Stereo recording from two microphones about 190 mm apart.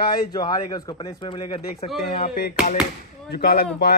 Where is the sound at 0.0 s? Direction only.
55° left (ahead or behind).